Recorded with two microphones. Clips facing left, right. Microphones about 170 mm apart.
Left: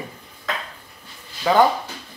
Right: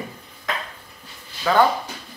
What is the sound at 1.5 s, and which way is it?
Speech, 20° left (ahead or behind).